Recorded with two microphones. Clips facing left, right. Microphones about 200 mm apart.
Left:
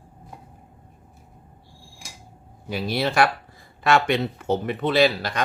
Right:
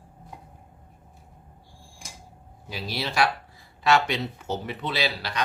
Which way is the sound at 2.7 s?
55° left (ahead or behind).